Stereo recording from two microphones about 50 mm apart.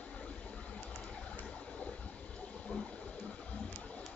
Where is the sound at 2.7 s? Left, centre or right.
Left.